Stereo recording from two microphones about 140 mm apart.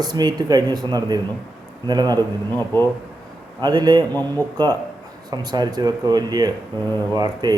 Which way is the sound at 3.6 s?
30° right (ahead or behind).